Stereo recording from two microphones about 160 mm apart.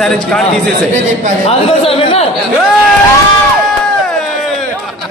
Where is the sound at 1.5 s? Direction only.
35° left (ahead or behind).